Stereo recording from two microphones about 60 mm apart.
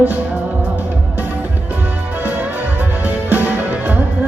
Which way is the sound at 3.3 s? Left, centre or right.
Right.